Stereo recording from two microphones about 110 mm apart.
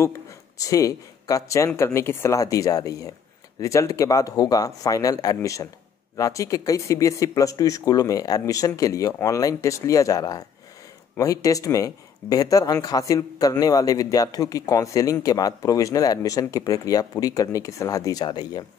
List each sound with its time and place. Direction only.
0.6 s speech: 30° left (ahead or behind)